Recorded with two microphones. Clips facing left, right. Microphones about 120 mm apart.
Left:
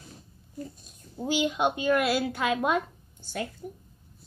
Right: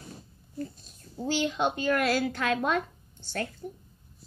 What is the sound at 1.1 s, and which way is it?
A child's voice, 15° left (ahead or behind).